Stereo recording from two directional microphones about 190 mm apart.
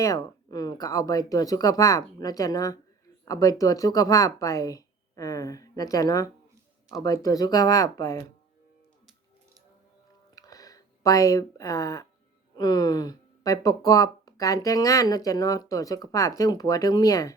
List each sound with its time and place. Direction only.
0.0 s speech: 20° left (ahead or behind)
10.3 s a sound: 20° left (ahead or behind)
12.5 s speech: 20° left (ahead or behind)